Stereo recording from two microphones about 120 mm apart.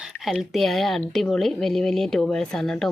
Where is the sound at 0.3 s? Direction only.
Centre (ahead or behind).